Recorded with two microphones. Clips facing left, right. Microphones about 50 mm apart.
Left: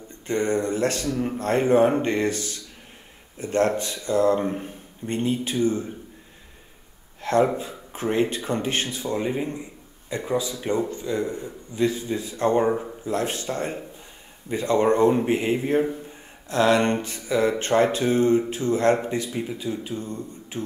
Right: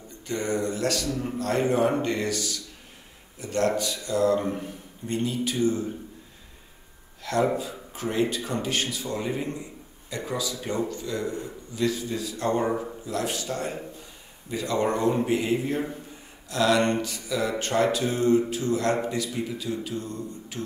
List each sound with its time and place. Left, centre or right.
0.3 s speech: left
7.2 s a man's voice: left